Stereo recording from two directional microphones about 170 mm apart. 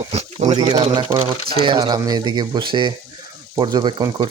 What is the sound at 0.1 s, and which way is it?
Speech, 40° right (ahead or behind).